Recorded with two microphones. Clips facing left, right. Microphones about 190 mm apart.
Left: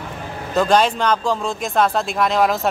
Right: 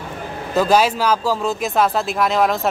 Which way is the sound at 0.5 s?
5° right (ahead or behind).